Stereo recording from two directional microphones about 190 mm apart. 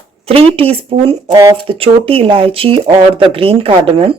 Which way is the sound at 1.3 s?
15° right (ahead or behind).